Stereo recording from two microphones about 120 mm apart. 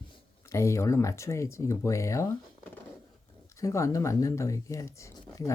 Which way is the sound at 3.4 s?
25° left (ahead or behind).